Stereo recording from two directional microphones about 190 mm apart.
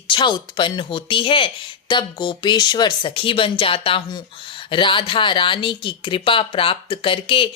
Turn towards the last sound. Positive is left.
turn(degrees=25)  # may be behind; listen again after turning